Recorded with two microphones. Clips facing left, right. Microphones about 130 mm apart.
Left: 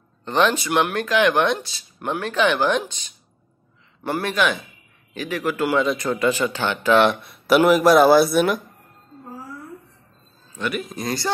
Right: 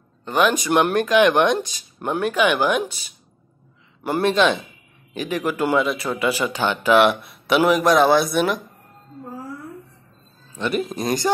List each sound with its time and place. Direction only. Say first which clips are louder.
0.2 s speech: even; 10° right (ahead or behind)
4.0 s speech: right 4 dB; 20° right (ahead or behind); by 8.5 s centre (ahead or behind)
10.6 s speech: right 3 dB; 25° right (ahead or behind)